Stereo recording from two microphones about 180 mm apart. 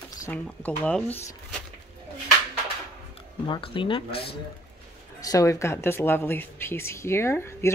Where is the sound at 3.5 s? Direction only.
30° left (ahead or behind).